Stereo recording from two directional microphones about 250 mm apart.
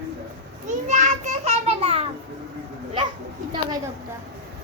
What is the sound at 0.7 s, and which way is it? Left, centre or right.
Children playing, right.